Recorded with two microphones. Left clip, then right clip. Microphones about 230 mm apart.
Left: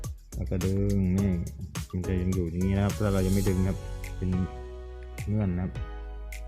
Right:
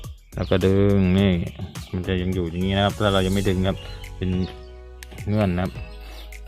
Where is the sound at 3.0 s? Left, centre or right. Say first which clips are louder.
Right 8 dB; right.